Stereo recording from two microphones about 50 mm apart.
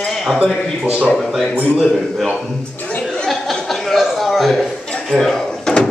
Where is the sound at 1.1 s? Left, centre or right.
Centre.